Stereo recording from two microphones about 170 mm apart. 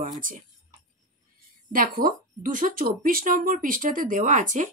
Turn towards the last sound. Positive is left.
turn(degrees=-50)  # may be behind; listen again after turning